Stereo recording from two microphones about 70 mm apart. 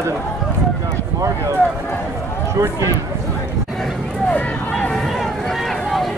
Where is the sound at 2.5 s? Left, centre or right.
Right.